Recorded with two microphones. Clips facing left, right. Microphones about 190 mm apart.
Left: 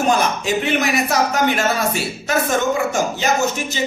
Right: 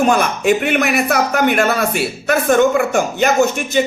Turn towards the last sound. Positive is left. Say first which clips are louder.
# right 4 dB
turn(degrees=-55)  # may be behind; listen again after turning